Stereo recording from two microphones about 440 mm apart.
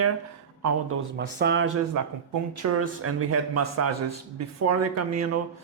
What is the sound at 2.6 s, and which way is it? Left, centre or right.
A man's voice, right.